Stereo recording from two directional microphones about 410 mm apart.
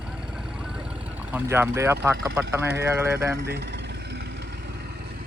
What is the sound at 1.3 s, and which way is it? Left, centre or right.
Speech, centre.